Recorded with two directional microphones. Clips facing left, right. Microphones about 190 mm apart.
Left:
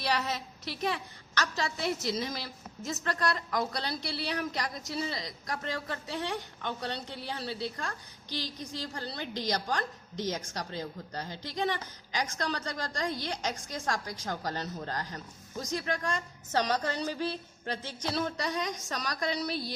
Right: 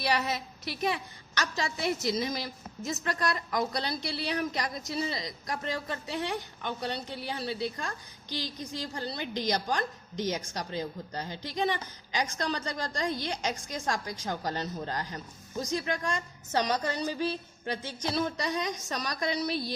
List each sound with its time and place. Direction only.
0.0 s a woman's voice: 10° right (ahead or behind)